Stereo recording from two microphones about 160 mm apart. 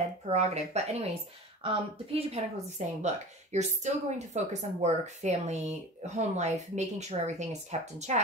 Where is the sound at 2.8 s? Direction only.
45° right (ahead or behind).